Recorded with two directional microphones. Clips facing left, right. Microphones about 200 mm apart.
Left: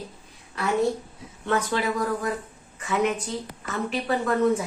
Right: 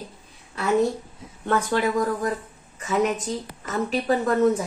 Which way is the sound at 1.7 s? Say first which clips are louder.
Right 3 dB; 45° right (ahead or behind).